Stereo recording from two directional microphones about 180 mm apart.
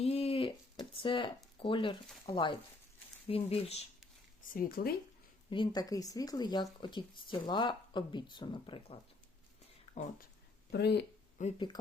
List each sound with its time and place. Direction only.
0.0 s a sound: 35° left (ahead or behind)
1.5 s speech: 30° left (ahead or behind)
4.6 s speech: 55° left (ahead or behind)
5.5 s speech: 25° left (ahead or behind)
10.0 s speech: 40° left (ahead or behind)
10.7 s speech: 70° left (ahead or behind)
11.5 s speech: 25° left (ahead or behind)